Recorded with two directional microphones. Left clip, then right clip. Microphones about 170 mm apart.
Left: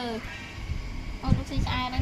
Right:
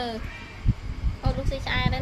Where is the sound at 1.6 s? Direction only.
50° right (ahead or behind).